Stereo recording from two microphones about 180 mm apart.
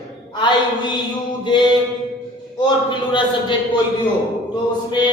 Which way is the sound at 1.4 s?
25° left (ahead or behind).